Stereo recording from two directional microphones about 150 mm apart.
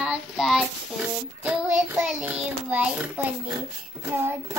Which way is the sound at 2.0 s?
10° right (ahead or behind).